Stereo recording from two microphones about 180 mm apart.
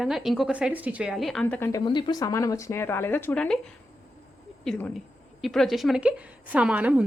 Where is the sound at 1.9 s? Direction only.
25° left (ahead or behind); by 3.6 s 5° left (ahead or behind).